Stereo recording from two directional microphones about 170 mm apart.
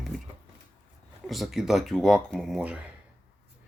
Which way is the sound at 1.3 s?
Centre (ahead or behind).